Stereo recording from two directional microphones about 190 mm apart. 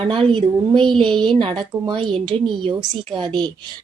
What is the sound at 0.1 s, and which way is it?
Speech, 25° right (ahead or behind).